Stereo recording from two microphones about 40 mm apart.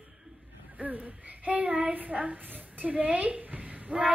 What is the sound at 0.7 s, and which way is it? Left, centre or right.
A woman's voice, right.